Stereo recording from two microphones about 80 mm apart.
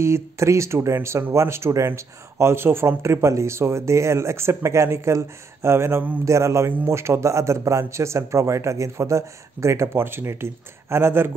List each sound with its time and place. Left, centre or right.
0.0 s speech: right